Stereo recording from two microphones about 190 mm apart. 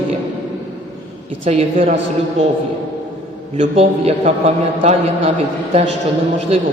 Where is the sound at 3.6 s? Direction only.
30° right (ahead or behind).